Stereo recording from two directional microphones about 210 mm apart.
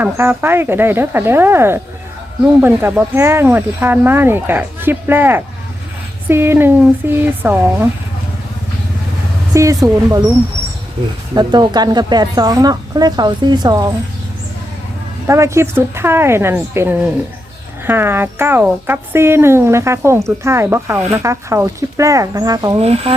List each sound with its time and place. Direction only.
0.0 s speech: 10° right (ahead or behind)
9.6 s speech: 15° right (ahead or behind)
11.3 s speech: 20° right (ahead or behind)
15.3 s speech: 15° right (ahead or behind)
22.8 s speech: 30° right (ahead or behind)